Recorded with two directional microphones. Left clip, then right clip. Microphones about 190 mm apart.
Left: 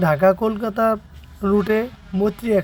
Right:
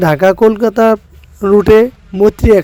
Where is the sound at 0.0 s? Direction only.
65° right (ahead or behind).